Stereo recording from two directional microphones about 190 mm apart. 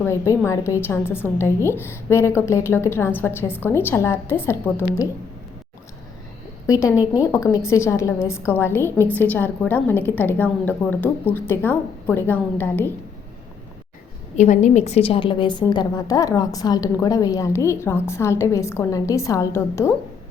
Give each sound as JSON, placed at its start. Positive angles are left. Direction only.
{"t": 0.0, "sound": "a woman's voice", "side_deg": 15}
{"t": 6.7, "sound": "a woman's voice", "side_deg": 15}
{"t": 14.3, "sound": "a woman's voice", "side_deg": 40}